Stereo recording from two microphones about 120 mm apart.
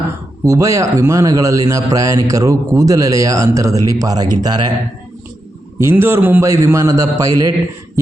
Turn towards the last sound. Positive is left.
turn(degrees=-30)  # may be behind; listen again after turning